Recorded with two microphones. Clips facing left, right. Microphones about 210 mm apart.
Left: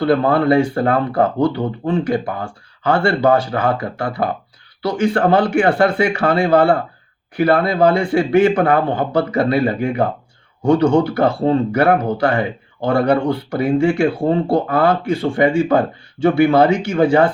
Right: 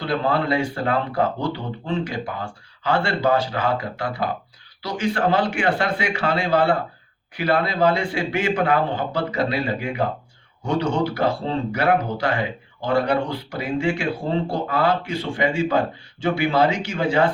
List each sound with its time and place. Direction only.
0.0 s a man's voice: 55° left (ahead or behind)